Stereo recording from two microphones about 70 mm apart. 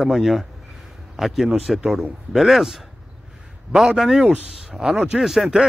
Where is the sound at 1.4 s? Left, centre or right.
Centre.